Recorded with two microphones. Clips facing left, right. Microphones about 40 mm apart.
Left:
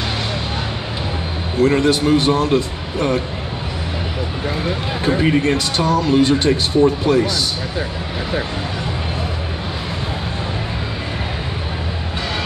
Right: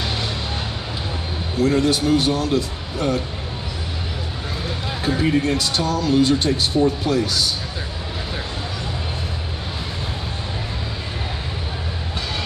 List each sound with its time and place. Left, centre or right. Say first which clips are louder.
1.6 s a man's voice: left 3 dB; left
5.0 s a man's voice: left 3 dB; left